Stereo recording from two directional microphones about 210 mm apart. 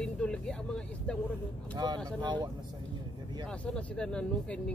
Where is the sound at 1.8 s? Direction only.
20° right (ahead or behind).